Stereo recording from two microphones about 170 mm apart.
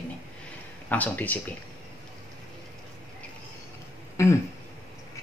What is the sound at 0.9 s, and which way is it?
Speech, 10° left (ahead or behind).